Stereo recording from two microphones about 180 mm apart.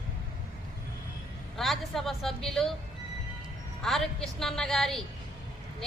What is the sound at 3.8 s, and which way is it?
Speech, centre (ahead or behind).